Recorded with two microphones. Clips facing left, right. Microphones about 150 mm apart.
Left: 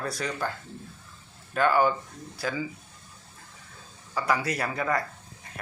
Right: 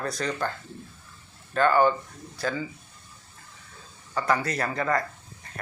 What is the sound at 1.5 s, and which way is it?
Speech, 10° left (ahead or behind).